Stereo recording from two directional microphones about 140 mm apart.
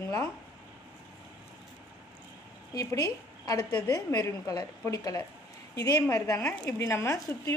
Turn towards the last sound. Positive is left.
turn(degrees=20)  # may be behind; listen again after turning